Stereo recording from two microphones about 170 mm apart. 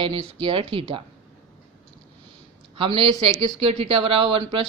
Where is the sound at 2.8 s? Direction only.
30° right (ahead or behind).